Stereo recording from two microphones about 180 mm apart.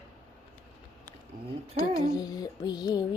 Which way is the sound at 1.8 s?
20° left (ahead or behind).